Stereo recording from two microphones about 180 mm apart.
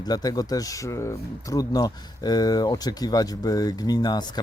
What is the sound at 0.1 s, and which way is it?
Speech, 20° left (ahead or behind).